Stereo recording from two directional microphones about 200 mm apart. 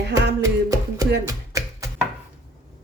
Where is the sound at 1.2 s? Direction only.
15° right (ahead or behind).